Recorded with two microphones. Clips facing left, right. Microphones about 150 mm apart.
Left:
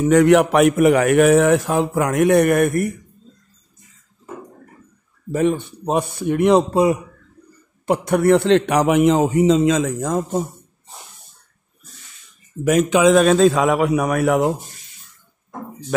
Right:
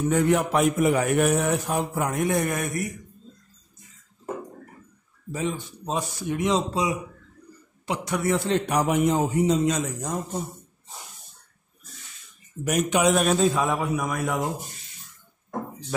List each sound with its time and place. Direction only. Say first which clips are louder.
0.0 s a man's voice: left 9 dB; 80° left; by 2.9 s 60° left (ahead or behind)
5.3 s a man's voice: left 10 dB; 65° left (ahead or behind); by 10.5 s 90° left
12.6 s a man's voice: left 7 dB; 90° left; by 14.5 s 70° left (ahead or behind)